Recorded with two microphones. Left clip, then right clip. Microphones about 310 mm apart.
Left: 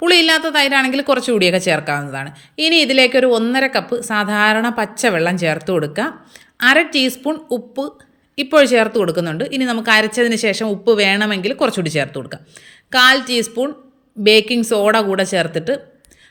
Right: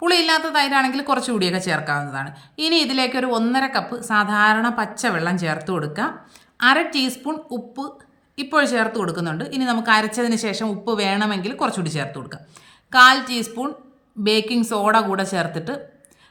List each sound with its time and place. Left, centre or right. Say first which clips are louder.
0.0 s a woman's voice: left 5 dB; centre